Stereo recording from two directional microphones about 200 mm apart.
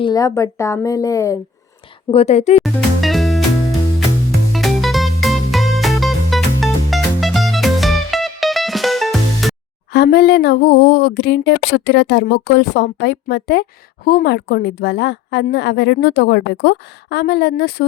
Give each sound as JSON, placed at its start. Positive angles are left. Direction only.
{"t": 0.0, "sound": "speech", "side_deg": 20}
{"t": 2.0, "sound": "a woman's voice", "side_deg": 30}
{"t": 2.6, "sound": "music", "side_deg": 0}
{"t": 9.9, "sound": "speech", "side_deg": 55}